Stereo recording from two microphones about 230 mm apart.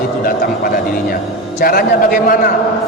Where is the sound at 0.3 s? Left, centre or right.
Left.